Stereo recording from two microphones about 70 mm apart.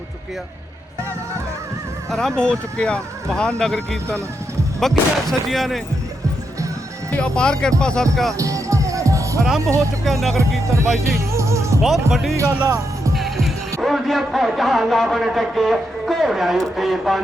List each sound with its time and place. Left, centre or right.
2.0 s a man's voice: centre
7.2 s a man's voice: centre
8.4 s music: right
9.6 s speech: right
10.0 s a man's voice: centre
11.2 s music: right
11.8 s a man's voice: centre
13.1 s music: centre
13.8 s a man's voice: centre